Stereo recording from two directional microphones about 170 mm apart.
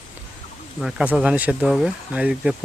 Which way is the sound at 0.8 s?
5° right (ahead or behind).